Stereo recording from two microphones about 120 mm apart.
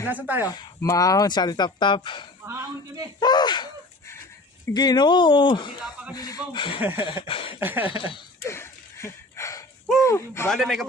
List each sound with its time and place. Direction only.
0.0 s speech: 15° right (ahead or behind)
0.5 s speech: 35° left (ahead or behind)
2.4 s speech: 20° right (ahead or behind)
3.2 s speech: 35° left (ahead or behind)
4.7 s speech: 35° left (ahead or behind)
5.8 s speech: 10° right (ahead or behind)
6.1 s speech: 30° left (ahead or behind)
6.7 s speech: 15° right (ahead or behind)
7.0 s a sound: 45° left (ahead or behind)
7.6 s speech: 15° right (ahead or behind)
7.9 s a sound: 45° left (ahead or behind)
8.4 s a sound: 20° left (ahead or behind)
10.1 s speech: 25° left (ahead or behind)
10.5 s a man's voice: centre (ahead or behind)